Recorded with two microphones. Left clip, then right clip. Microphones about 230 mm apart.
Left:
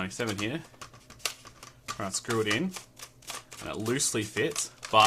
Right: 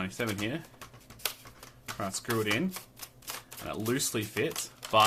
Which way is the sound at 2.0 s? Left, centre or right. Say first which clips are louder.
Left 2 dB; centre.